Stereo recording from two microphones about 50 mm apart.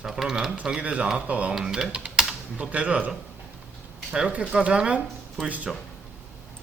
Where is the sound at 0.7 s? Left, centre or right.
Right.